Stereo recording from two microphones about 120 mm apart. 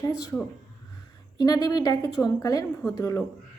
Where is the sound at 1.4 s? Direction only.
35° left (ahead or behind).